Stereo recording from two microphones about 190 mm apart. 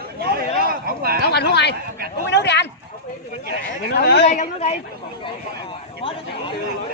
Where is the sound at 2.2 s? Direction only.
65° left (ahead or behind).